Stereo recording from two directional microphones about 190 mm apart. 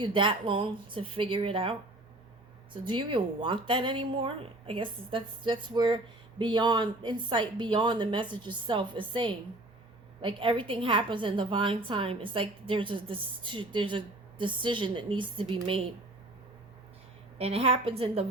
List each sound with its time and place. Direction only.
0.0 s a woman's voice: 25° right (ahead or behind)
2.7 s a woman's voice: 25° right (ahead or behind)
17.3 s a woman's voice: 30° right (ahead or behind)